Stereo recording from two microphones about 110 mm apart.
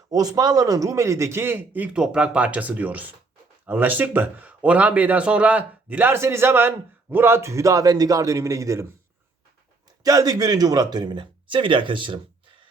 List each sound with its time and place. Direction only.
0.1 s speech: 35° right (ahead or behind)
10.0 s speech: 35° right (ahead or behind); by 12.2 s 50° right (ahead or behind)